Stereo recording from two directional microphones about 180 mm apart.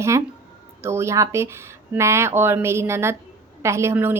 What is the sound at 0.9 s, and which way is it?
Speech, 15° right (ahead or behind).